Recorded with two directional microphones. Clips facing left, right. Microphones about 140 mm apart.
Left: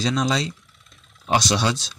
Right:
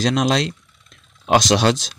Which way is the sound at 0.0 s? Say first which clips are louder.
Right 4 dB; 90° right.